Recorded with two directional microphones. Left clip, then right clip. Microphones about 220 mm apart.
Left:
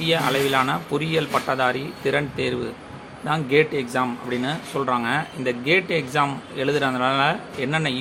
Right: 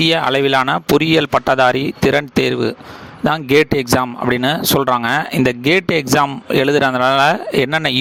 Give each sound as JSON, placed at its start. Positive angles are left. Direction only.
{"t": 0.0, "sound": "speech", "side_deg": -50}